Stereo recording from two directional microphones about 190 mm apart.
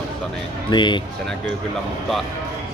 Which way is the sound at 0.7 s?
25° left (ahead or behind).